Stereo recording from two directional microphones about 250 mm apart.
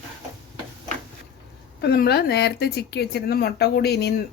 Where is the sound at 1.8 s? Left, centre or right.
Left.